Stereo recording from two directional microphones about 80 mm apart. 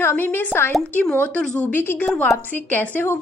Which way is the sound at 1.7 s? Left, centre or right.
Left.